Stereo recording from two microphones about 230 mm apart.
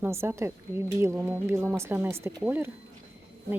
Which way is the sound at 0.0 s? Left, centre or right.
Centre.